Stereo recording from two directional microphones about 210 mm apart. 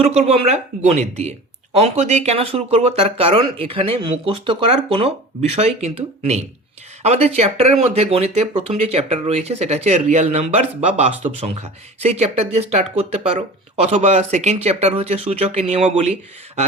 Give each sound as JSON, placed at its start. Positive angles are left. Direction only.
{"t": 0.1, "sound": "speech", "side_deg": -30}